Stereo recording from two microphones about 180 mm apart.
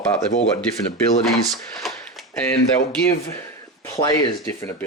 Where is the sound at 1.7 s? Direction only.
Centre (ahead or behind).